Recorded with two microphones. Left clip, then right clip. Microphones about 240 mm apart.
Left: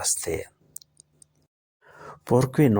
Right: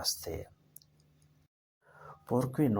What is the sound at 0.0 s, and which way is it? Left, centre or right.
Speech, left.